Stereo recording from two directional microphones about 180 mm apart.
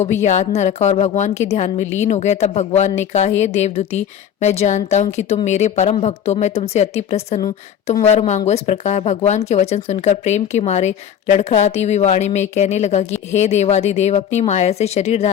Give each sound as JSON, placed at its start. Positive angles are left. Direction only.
{"t": 0.0, "sound": "speech", "side_deg": 40}
{"t": 7.4, "sound": "a woman's voice", "side_deg": 25}
{"t": 8.0, "sound": "speech", "side_deg": 40}